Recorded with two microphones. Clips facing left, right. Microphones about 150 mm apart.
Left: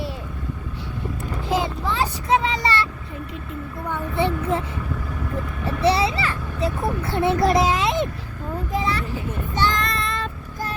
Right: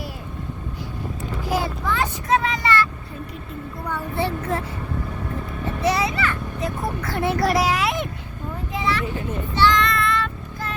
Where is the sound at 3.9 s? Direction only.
20° left (ahead or behind).